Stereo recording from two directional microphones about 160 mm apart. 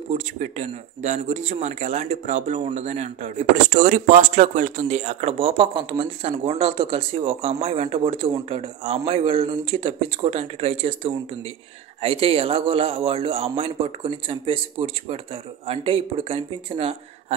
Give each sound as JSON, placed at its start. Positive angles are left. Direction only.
{"t": 0.1, "sound": "speech", "side_deg": -45}